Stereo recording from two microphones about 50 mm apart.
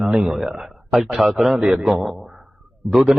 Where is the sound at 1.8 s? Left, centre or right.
Centre.